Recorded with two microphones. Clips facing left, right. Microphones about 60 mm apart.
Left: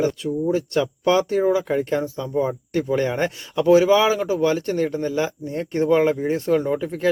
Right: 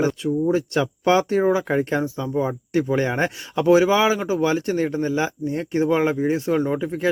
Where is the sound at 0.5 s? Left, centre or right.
Right; by 6.9 s centre.